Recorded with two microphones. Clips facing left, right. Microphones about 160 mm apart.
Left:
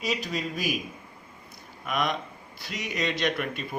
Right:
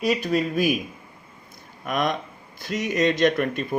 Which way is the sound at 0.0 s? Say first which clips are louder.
Right 8 dB; 55° right (ahead or behind).